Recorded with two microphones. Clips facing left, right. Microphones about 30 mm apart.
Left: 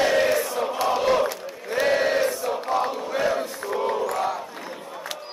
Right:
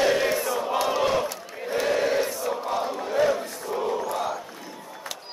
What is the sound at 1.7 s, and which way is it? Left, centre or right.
Chant, left.